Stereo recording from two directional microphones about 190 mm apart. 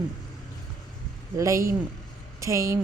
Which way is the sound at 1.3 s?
15° right (ahead or behind).